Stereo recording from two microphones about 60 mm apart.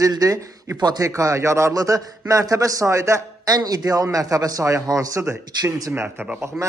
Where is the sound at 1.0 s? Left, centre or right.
Right.